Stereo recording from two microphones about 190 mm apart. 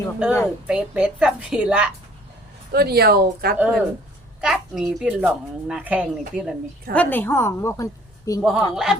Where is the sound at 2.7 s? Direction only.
55° right (ahead or behind).